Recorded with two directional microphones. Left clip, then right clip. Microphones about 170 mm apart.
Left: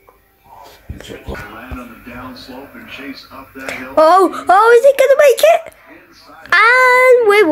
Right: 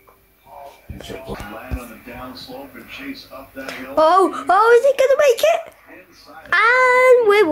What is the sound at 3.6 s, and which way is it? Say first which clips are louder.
Speech: left 5 dB; 15° left (ahead or behind).